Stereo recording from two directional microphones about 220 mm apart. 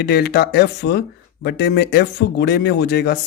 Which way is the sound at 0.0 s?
45° left (ahead or behind).